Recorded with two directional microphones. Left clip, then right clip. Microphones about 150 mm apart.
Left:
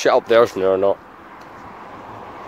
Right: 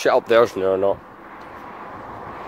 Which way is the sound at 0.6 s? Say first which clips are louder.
Left 2 dB; 25° left (ahead or behind).